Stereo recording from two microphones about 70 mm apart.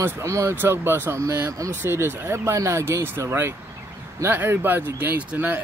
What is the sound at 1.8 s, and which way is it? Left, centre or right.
Speech, right.